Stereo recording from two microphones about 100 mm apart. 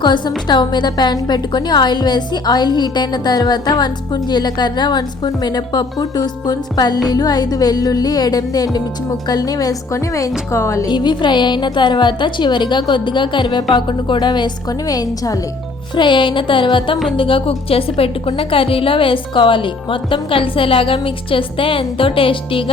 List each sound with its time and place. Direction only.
0.0 s a woman's voice: 50° left (ahead or behind)
7.1 s music: 40° left (ahead or behind)
10.5 s speech: 30° left (ahead or behind)
10.8 s a woman's voice: 50° left (ahead or behind)
16.0 s a woman's voice: 50° left (ahead or behind)